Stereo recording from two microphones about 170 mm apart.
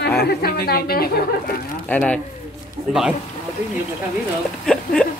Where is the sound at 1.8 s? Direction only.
10° left (ahead or behind).